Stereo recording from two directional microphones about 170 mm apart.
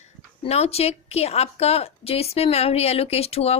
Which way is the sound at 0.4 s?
40° left (ahead or behind).